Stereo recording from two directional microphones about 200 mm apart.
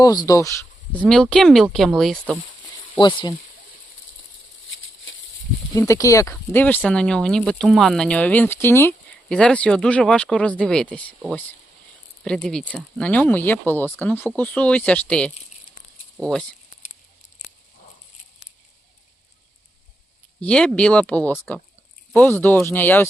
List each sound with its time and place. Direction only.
0.0 s speech: 20° left (ahead or behind)
1.0 s speech: 5° left (ahead or behind)
3.0 s speech: 25° left (ahead or behind)
5.7 s speech: 15° left (ahead or behind)
20.4 s speech: 5° left (ahead or behind)